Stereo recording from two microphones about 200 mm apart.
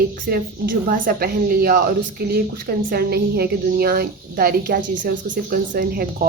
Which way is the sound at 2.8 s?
50° right (ahead or behind).